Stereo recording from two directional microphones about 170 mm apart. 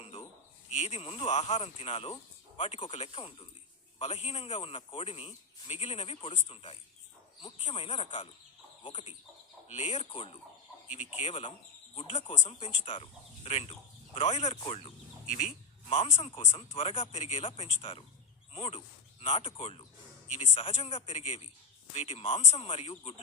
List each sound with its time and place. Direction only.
0.0 s a sound: 35° left (ahead or behind)
0.7 s a man's voice: 40° left (ahead or behind)
8.8 s fowl: 30° left (ahead or behind)
9.6 s a man's voice: 40° left (ahead or behind)
15.3 s a man's voice: 45° left (ahead or behind)